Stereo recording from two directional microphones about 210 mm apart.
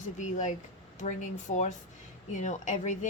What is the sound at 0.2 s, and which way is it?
Speech, 35° left (ahead or behind).